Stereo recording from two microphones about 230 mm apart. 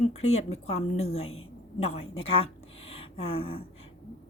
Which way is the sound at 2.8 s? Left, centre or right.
Left.